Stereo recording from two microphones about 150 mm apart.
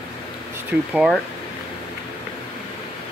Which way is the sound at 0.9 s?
Centre (ahead or behind).